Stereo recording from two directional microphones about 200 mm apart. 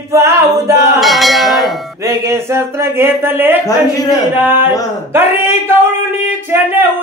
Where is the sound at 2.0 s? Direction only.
15° right (ahead or behind).